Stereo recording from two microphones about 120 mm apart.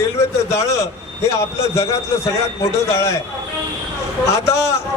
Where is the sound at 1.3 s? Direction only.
25° left (ahead or behind).